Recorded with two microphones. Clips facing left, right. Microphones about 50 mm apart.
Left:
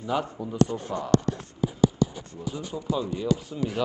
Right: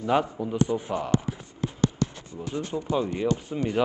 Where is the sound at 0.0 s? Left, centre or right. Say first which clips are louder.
Right 4 dB; right.